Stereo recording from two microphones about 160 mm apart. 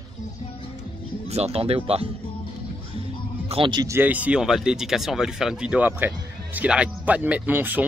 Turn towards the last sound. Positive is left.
turn(degrees=-10)  # may be behind; listen again after turning